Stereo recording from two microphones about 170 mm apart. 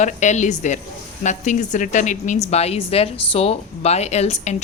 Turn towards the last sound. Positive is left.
turn(degrees=40)  # may be behind; listen again after turning